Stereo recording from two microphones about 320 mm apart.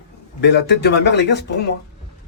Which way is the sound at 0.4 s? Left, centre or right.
Left.